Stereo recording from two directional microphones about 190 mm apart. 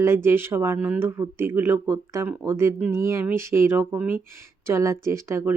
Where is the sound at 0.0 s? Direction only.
15° right (ahead or behind).